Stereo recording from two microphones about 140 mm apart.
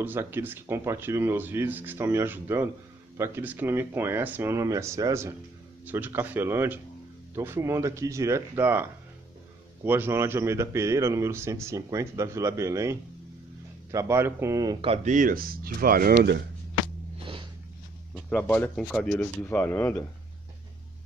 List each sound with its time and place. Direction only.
0.0 s speech: 15° right (ahead or behind)
13.9 s speech: 20° right (ahead or behind)
15.0 s speech: 75° right (ahead or behind); by 16.2 s 90° right
17.2 s a sound: 40° right (ahead or behind)
18.3 s speech: 15° left (ahead or behind)